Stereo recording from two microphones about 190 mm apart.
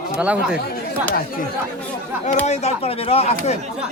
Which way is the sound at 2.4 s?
35° left (ahead or behind).